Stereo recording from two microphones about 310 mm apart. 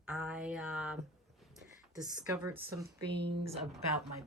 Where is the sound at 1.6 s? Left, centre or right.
Centre.